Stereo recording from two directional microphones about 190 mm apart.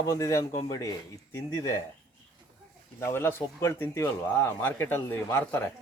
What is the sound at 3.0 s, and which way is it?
Speech, 15° left (ahead or behind).